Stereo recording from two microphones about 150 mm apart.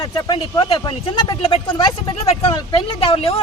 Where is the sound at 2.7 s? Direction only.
40° left (ahead or behind).